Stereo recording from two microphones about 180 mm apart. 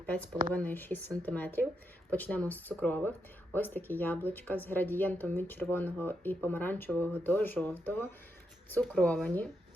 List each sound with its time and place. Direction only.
0.0 s speech: 10° left (ahead or behind)